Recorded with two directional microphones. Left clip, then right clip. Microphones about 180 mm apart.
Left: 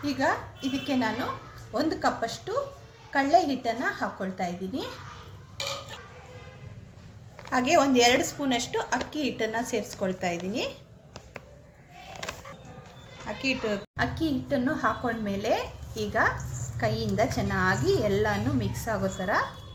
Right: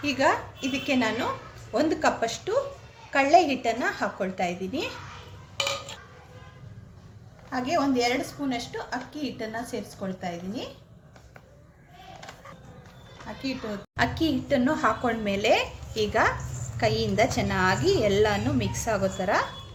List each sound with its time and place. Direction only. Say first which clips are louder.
0.0 s a woman's voice: right 4 dB; 15° right (ahead or behind)
7.5 s a woman's voice: left 3 dB; 25° left (ahead or behind)
12.2 s music: left 9 dB; 80° left
13.2 s a woman's voice: left 5 dB; 20° left (ahead or behind)
14.3 s a woman's voice: right 3 dB; 20° right (ahead or behind)